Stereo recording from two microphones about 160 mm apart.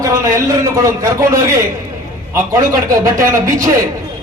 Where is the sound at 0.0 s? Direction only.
20° right (ahead or behind).